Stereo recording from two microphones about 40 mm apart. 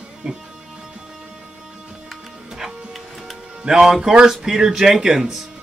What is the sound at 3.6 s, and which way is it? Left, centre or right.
Speech, centre.